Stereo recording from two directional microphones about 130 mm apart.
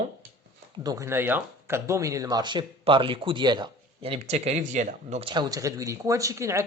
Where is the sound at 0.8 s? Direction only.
20° right (ahead or behind); by 5.2 s 70° right (ahead or behind).